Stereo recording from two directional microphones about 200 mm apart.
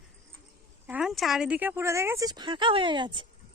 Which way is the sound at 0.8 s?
5° right (ahead or behind).